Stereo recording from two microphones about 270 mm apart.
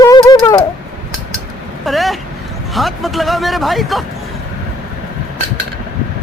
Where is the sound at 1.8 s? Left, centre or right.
Centre.